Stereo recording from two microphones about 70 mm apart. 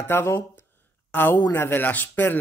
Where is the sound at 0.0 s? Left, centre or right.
Left.